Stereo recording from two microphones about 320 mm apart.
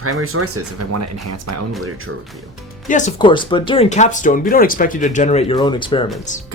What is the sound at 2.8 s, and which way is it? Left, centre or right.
Speech, left.